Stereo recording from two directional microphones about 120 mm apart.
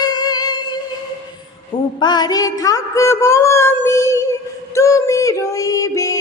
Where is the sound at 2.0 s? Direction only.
35° left (ahead or behind).